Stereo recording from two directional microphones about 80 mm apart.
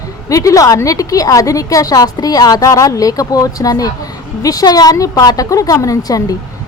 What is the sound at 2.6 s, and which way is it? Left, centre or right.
A woman's voice, left.